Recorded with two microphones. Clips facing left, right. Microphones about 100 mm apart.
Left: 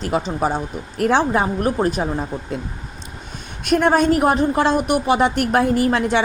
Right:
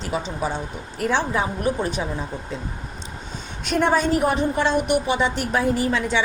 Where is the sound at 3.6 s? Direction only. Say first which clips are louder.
Left 4 dB; 55° left (ahead or behind).